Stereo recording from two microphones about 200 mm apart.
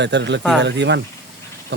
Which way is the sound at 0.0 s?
60° right (ahead or behind).